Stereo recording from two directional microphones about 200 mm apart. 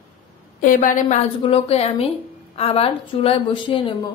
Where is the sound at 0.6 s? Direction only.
40° left (ahead or behind).